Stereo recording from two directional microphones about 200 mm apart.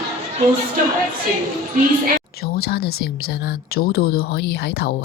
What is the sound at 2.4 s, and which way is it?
Speech, 50° left (ahead or behind).